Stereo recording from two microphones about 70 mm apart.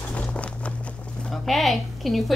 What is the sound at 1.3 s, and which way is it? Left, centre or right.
A woman's voice, centre.